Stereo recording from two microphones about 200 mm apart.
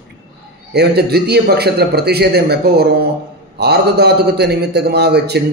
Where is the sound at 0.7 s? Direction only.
55° right (ahead or behind).